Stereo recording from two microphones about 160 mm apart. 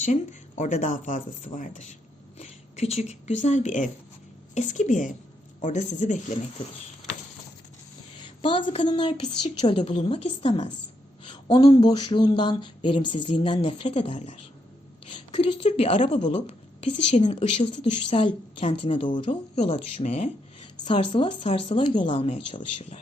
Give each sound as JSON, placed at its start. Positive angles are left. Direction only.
{"t": 0.0, "sound": "speech", "side_deg": 50}
{"t": 8.4, "sound": "a woman's voice", "side_deg": 35}